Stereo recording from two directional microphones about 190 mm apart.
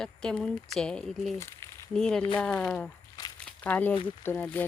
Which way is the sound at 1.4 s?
15° left (ahead or behind).